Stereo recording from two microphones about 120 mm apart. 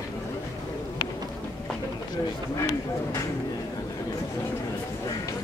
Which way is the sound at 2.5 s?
25° left (ahead or behind).